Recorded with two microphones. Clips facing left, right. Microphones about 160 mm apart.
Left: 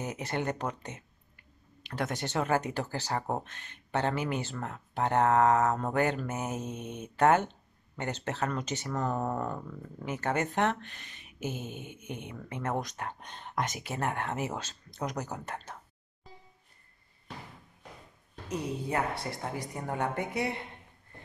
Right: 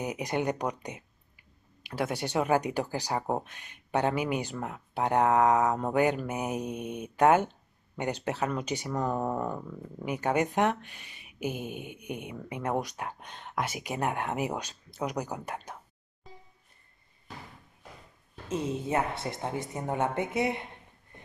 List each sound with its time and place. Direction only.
0.0 s speech: 15° right (ahead or behind)
18.5 s speech: 20° right (ahead or behind)